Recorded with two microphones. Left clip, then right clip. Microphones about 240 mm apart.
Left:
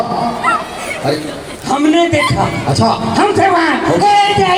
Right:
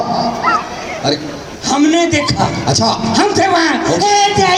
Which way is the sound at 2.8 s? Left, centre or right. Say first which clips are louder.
Left 3 dB; right.